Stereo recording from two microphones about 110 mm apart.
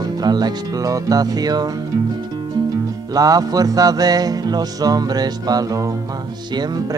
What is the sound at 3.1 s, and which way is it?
Music, 35° right (ahead or behind).